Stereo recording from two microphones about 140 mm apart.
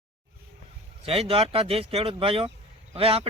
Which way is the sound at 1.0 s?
45° right (ahead or behind).